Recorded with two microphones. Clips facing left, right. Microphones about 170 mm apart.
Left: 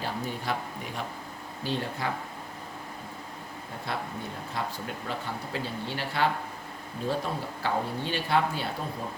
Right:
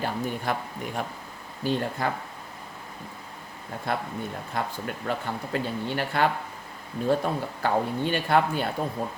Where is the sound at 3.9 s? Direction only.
50° right (ahead or behind).